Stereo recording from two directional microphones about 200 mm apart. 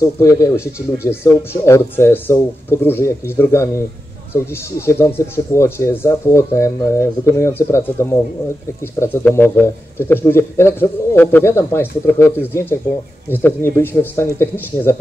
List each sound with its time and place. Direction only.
0.0 s speech: 15° left (ahead or behind)